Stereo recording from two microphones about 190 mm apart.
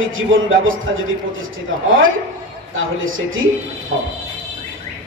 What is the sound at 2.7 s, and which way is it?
Speech, 90° right.